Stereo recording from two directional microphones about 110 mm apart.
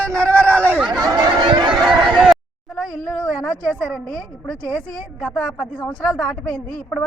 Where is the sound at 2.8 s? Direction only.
5° left (ahead or behind).